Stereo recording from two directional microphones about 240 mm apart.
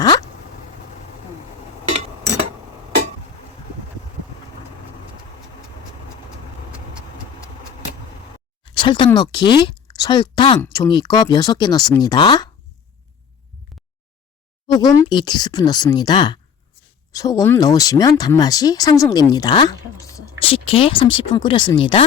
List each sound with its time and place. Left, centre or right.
8.7 s a sound: centre
9.0 s speech: centre
14.7 s speech: centre